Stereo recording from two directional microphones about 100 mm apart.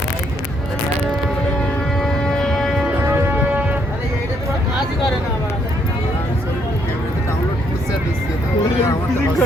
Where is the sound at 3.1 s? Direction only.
20° right (ahead or behind).